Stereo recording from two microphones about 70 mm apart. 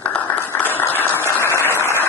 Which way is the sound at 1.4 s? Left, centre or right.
Right.